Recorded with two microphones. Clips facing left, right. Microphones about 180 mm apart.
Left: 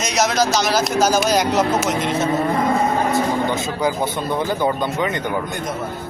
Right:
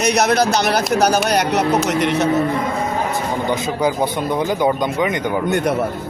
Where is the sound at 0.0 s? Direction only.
60° right (ahead or behind).